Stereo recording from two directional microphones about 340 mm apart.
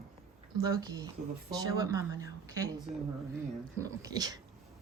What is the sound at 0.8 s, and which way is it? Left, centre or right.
Speech, centre.